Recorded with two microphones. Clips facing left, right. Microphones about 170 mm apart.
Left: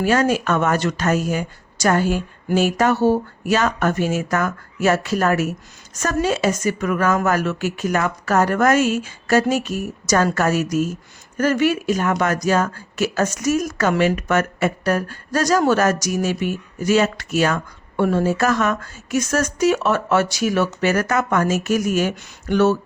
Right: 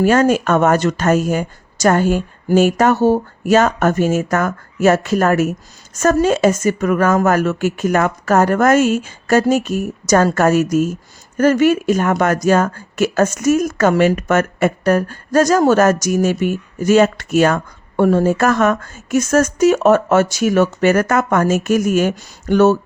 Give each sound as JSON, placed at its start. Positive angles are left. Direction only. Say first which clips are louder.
{"t": 0.0, "sound": "speech", "louder": "right 5 dB", "side_deg": -50}